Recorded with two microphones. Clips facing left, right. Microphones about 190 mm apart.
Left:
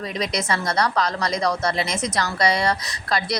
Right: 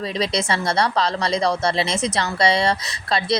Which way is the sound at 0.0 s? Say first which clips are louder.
Right 3 dB; 30° right (ahead or behind).